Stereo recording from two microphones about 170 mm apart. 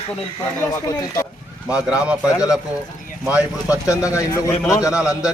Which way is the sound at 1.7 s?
5° right (ahead or behind).